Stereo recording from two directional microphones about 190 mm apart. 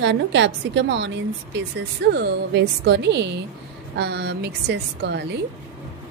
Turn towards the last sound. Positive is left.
turn(degrees=-60)  # may be behind; listen again after turning